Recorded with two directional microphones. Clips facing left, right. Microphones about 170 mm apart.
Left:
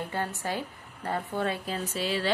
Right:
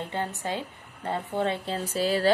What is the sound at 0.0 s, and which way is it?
Speech, 20° right (ahead or behind).